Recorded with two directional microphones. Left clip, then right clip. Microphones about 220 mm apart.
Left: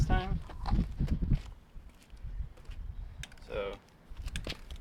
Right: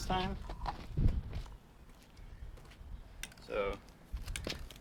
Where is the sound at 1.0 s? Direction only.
35° left (ahead or behind).